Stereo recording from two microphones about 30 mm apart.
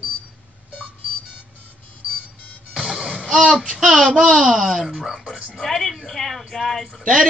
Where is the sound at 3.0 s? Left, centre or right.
Centre.